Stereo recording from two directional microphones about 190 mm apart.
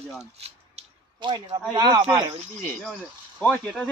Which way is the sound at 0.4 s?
30° right (ahead or behind).